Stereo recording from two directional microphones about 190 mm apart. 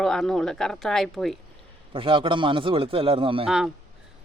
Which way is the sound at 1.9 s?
25° right (ahead or behind).